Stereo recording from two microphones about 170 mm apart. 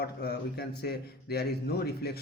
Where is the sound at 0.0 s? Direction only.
75° left (ahead or behind).